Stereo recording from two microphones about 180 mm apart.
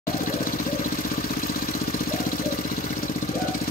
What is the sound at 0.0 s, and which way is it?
Vehicle, 50° left (ahead or behind).